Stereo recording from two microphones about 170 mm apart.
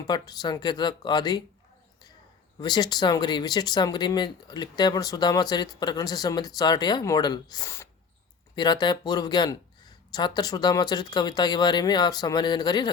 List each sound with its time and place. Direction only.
0.1 s speech: 25° left (ahead or behind)
2.6 s speech: 25° left (ahead or behind)